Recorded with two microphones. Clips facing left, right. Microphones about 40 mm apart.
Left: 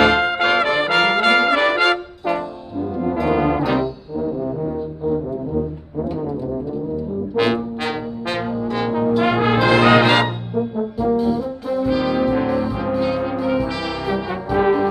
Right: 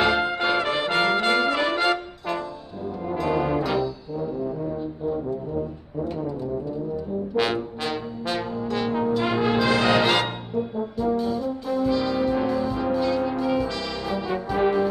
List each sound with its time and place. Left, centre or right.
0.2 s brass instrument: left
2.2 s brass instrument: centre
6.0 s brass instrument: centre
7.3 s brass instrument: centre
8.3 s brass instrument: left
8.9 s brass instrument: centre
9.4 s brass instrument: left
10.2 s brass instrument: centre
11.9 s brass instrument: left
12.3 s music: centre
13.7 s brass instrument: left